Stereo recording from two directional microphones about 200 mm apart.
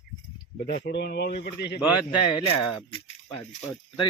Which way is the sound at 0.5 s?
55° left (ahead or behind).